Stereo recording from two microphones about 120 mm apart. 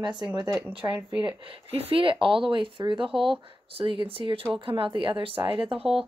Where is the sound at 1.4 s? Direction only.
50° right (ahead or behind).